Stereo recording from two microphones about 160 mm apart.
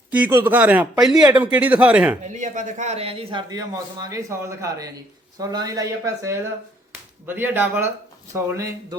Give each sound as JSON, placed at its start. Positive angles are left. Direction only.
{"t": 0.1, "sound": "speech", "side_deg": -10}
{"t": 2.2, "sound": "a man's voice", "side_deg": -50}